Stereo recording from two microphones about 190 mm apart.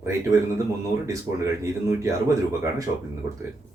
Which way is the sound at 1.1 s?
15° right (ahead or behind).